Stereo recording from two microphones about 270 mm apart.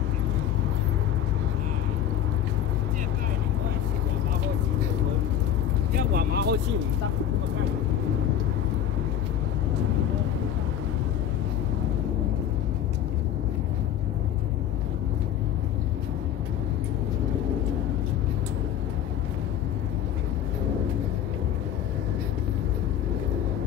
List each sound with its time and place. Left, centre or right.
5.9 s vehicle: right